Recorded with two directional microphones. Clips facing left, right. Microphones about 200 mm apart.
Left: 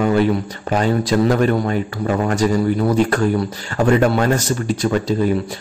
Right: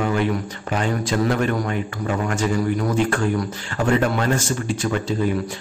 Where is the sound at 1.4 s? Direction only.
35° left (ahead or behind).